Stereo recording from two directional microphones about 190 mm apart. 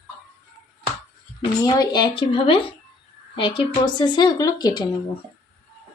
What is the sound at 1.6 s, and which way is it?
A woman's voice, 20° left (ahead or behind).